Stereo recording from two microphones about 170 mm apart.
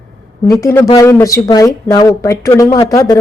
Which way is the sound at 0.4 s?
15° left (ahead or behind).